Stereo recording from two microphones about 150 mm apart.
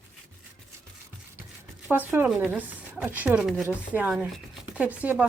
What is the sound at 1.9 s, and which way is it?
Speech, 15° right (ahead or behind).